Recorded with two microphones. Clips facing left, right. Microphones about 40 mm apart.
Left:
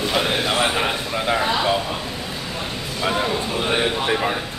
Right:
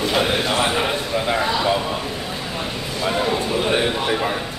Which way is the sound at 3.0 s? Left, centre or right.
Centre.